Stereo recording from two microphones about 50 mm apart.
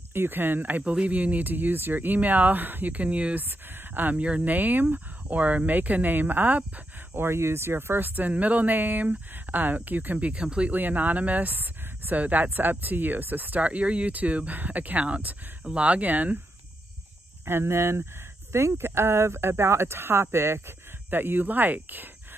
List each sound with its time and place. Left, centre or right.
0.1 s speech: right
3.3 s speech: right
7.2 s speech: right; by 10.7 s centre
10.7 s speech: right
17.5 s speech: right
21.1 s speech: right